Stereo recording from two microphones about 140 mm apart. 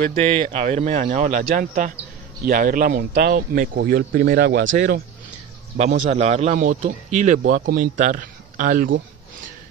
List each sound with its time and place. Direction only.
0.2 s speech: 45° right (ahead or behind); by 1.9 s 70° right (ahead or behind)
2.4 s speech: 90° right
5.8 s a man's voice: 55° right (ahead or behind)
6.6 s speech: 70° right (ahead or behind)